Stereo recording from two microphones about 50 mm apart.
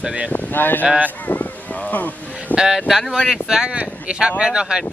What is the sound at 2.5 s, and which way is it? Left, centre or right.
Speech, centre.